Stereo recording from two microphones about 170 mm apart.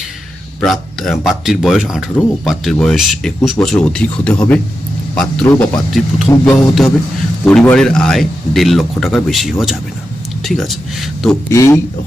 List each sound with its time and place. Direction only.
0.6 s speech: centre (ahead or behind)
11.4 s speech: 15° left (ahead or behind)